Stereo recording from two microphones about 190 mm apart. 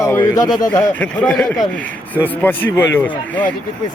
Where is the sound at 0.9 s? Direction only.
10° left (ahead or behind).